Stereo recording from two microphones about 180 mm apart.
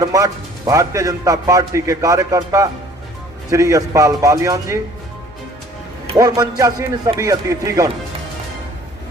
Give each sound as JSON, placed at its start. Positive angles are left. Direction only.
{"t": 0.0, "sound": "a man's voice", "side_deg": -20}
{"t": 6.1, "sound": "a man's voice", "side_deg": -20}